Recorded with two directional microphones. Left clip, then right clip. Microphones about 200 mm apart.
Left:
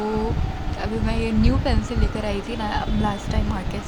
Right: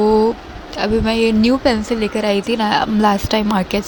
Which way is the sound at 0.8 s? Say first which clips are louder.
Right 11 dB; 35° right (ahead or behind).